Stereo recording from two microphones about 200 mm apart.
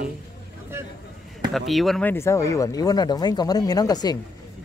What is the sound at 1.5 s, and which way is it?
Speech, centre (ahead or behind).